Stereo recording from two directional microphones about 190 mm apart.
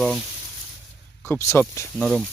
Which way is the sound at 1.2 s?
15° left (ahead or behind).